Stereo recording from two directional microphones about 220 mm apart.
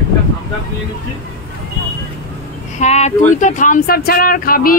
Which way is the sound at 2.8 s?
30° left (ahead or behind).